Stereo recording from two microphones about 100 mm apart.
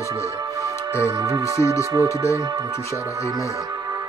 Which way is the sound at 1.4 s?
30° left (ahead or behind).